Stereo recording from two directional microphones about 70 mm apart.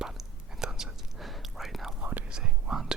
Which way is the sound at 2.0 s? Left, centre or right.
Right.